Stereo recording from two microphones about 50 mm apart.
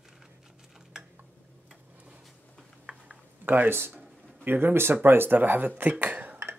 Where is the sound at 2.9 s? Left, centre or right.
Right.